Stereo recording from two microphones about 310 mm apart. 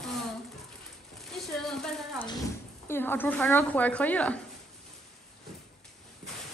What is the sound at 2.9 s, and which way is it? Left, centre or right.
Speech, centre.